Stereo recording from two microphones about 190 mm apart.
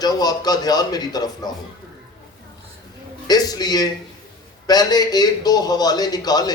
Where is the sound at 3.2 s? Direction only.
20° left (ahead or behind).